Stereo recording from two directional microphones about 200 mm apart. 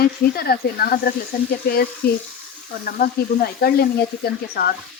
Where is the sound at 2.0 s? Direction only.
55° left (ahead or behind).